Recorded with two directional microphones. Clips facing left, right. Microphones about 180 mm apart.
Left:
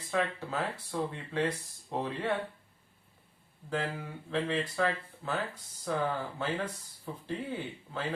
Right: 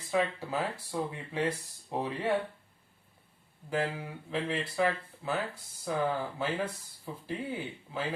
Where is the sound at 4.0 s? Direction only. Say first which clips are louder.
Left 1 dB; 10° right (ahead or behind).